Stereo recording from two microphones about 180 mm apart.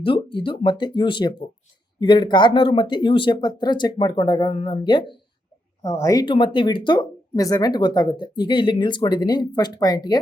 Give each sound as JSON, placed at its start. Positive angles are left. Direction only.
{"t": 0.0, "sound": "speech", "side_deg": 25}